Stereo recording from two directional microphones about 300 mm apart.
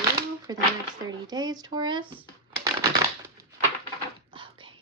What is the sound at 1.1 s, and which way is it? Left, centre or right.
Speech, centre.